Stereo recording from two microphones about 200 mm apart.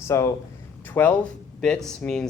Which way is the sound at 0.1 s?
15° left (ahead or behind).